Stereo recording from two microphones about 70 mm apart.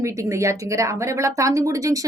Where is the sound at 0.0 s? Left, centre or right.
Right.